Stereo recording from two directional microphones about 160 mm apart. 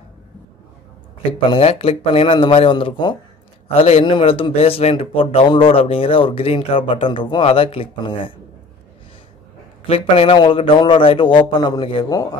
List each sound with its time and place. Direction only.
1.5 s speech: 40° left (ahead or behind)
9.8 s speech: 35° left (ahead or behind)